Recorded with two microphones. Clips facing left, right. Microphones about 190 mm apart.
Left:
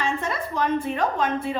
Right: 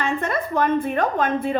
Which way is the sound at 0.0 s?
55° right (ahead or behind).